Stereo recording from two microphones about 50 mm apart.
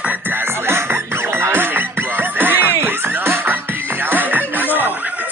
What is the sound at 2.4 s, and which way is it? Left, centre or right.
Music, right.